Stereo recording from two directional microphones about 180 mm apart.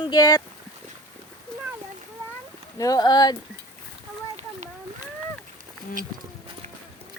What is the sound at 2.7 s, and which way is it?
Speech, 20° left (ahead or behind).